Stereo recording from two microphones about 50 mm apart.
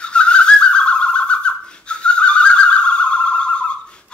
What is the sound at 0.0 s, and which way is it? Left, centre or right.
Bird, left.